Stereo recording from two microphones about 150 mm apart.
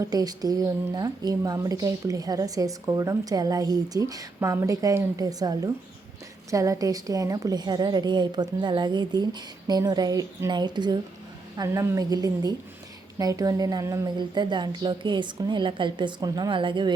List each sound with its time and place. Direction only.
0.0 s speech: 25° right (ahead or behind)